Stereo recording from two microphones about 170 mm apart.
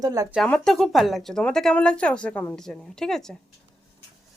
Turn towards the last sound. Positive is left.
turn(degrees=0)  # may be behind; listen again after turning